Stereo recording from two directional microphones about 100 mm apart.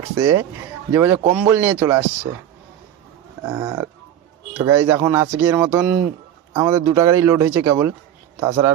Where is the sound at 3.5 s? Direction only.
30° right (ahead or behind).